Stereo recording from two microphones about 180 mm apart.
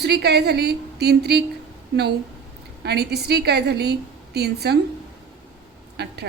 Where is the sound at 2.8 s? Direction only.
65° right (ahead or behind).